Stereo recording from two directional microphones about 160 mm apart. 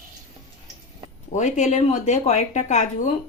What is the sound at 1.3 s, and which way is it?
Speech, 50° left (ahead or behind).